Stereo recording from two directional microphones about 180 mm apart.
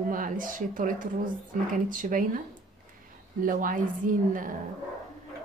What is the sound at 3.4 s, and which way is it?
Speech, 50° right (ahead or behind).